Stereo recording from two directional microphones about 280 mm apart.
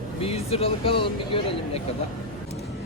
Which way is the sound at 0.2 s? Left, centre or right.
Left.